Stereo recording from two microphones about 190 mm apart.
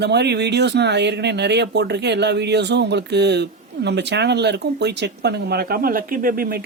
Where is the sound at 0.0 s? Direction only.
60° right (ahead or behind).